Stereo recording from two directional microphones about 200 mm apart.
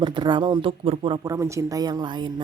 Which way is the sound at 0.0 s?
25° right (ahead or behind).